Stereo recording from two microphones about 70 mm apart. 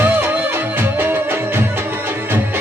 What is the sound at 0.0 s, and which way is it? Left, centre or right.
Music, right.